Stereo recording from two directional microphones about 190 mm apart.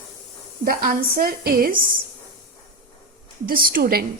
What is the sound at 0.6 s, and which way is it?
A woman's voice, 50° right (ahead or behind).